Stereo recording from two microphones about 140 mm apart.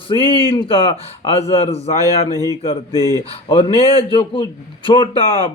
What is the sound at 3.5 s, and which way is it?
A man's voice, 40° left (ahead or behind).